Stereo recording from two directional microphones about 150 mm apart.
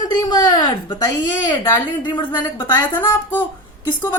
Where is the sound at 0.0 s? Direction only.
25° left (ahead or behind).